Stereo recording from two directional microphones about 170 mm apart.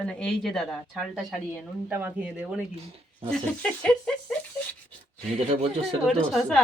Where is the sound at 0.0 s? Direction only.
5° left (ahead or behind).